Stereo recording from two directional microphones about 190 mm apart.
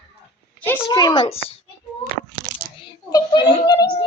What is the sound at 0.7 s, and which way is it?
Speech, 20° left (ahead or behind).